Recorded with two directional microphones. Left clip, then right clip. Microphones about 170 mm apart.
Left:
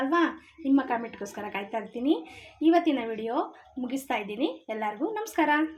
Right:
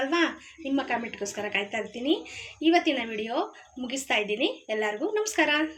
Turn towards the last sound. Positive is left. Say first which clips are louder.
# right 1 dB
turn(degrees=45)  # may be behind; listen again after turning